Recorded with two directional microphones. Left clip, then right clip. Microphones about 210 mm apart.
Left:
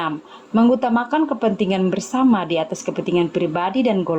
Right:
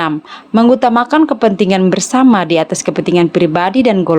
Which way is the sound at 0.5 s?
40° right (ahead or behind).